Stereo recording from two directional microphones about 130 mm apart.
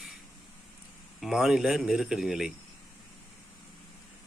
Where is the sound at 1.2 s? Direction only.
5° right (ahead or behind).